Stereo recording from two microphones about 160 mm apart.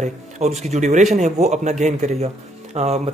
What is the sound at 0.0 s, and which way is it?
Speech, 45° right (ahead or behind).